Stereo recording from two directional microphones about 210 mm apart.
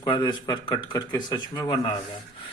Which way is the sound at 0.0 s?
20° left (ahead or behind).